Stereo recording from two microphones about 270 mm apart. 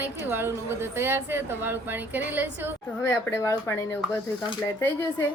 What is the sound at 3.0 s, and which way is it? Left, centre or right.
Speech, centre.